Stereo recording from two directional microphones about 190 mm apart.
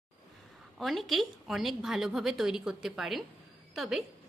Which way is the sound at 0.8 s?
Centre (ahead or behind).